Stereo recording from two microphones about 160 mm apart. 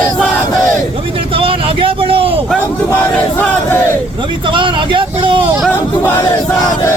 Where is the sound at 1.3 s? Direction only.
35° right (ahead or behind).